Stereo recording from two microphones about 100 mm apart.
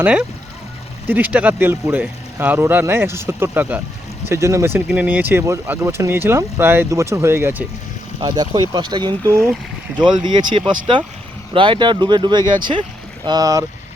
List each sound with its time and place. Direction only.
0.0 s speech: 10° right (ahead or behind)
4.3 s speech: 30° right (ahead or behind)
4.9 s speech: 15° right (ahead or behind)
8.2 s speech: 45° right (ahead or behind)